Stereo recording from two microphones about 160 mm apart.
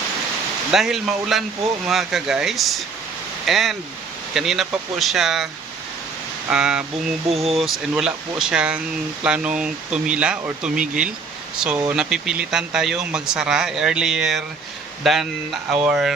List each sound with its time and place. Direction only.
0.7 s speech: centre (ahead or behind)
6.5 s speech: 5° right (ahead or behind)
7.3 s speech: 40° right (ahead or behind)
7.6 s speech: 5° right (ahead or behind)